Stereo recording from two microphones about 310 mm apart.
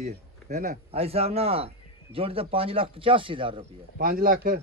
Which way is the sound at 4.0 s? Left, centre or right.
Right.